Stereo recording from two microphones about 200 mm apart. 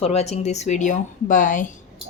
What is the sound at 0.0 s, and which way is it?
A woman's voice, 30° left (ahead or behind).